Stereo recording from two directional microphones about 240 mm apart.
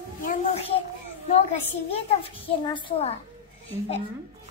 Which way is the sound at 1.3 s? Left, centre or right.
Left.